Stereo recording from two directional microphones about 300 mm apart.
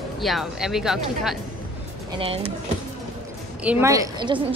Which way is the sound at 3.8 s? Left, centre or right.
Centre.